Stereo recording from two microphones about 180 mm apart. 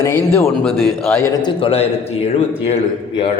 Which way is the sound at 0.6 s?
Centre (ahead or behind).